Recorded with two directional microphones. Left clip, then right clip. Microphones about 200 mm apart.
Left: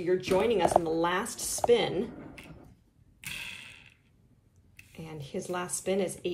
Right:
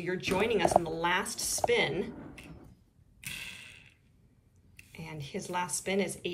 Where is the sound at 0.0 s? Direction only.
15° left (ahead or behind).